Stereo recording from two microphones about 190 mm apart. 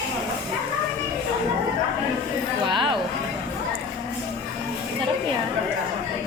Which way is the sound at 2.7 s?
25° right (ahead or behind).